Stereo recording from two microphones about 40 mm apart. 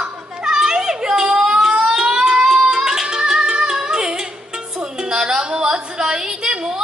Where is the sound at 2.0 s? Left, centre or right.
Right.